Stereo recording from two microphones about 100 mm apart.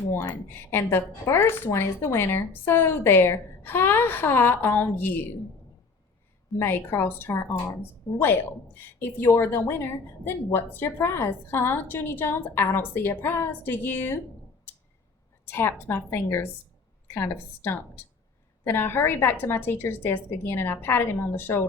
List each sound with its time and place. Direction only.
0.1 s a woman's voice: 25° left (ahead or behind)
6.6 s a woman's voice: 25° left (ahead or behind)
15.4 s a woman's voice: 20° left (ahead or behind)